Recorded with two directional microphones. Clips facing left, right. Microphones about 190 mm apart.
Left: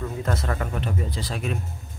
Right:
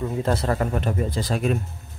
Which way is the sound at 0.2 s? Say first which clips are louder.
Right 6 dB; 30° right (ahead or behind).